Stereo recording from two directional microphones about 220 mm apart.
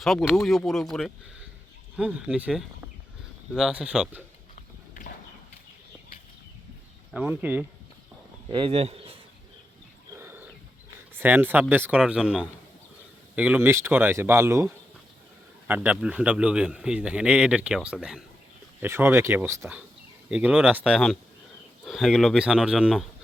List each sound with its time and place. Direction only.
0.0 s a man's voice: centre (ahead or behind)
7.1 s speech: 5° right (ahead or behind)
8.5 s speech: 25° right (ahead or behind)
10.2 s wild animals: 10° right (ahead or behind)
11.1 s a man's voice: 10° right (ahead or behind)